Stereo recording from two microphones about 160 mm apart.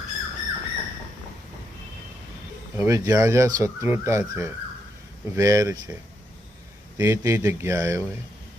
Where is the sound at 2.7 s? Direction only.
20° right (ahead or behind).